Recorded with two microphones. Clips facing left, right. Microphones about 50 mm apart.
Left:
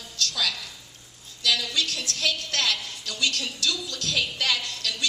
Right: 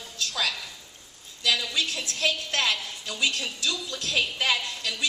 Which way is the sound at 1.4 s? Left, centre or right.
Centre.